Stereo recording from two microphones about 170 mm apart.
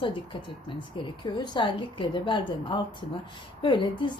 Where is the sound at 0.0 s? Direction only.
30° left (ahead or behind).